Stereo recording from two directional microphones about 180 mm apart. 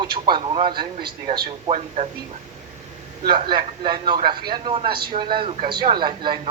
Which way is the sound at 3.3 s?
25° right (ahead or behind).